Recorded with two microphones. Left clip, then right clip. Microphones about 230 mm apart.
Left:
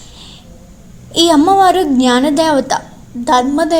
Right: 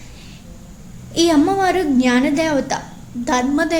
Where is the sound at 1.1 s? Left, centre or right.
Left.